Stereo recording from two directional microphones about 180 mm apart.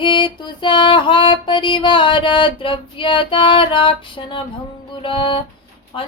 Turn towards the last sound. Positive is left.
turn(degrees=30)  # may be behind; listen again after turning